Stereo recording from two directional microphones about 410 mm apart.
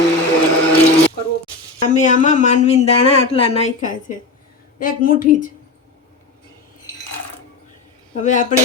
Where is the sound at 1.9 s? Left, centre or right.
Centre.